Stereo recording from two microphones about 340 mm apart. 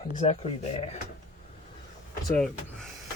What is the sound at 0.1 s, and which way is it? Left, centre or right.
Speech, centre.